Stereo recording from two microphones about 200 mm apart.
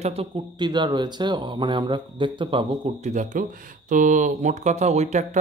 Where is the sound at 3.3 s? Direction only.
40° right (ahead or behind).